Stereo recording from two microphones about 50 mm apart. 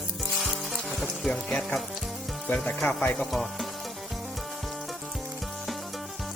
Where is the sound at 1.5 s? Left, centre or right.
Centre.